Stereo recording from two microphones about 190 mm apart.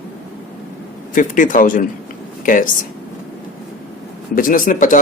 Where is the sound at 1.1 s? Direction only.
45° left (ahead or behind).